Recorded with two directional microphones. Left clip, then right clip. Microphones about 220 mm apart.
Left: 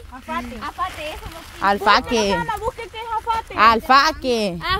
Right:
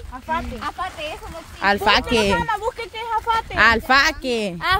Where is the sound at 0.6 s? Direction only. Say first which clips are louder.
Left 1 dB; 5° right (ahead or behind).